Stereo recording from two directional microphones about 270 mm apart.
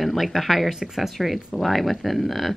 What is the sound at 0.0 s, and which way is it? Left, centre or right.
Speech, centre.